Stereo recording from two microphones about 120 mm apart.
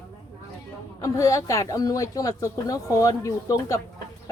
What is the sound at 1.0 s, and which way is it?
A woman's voice, 25° left (ahead or behind).